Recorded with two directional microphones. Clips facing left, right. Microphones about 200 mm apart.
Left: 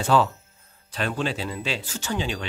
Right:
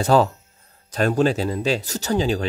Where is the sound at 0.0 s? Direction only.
40° right (ahead or behind).